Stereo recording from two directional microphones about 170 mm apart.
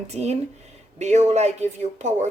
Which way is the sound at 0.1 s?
40° right (ahead or behind).